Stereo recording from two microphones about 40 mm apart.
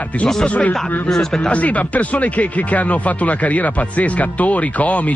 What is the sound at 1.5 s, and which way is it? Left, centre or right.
Speech, left.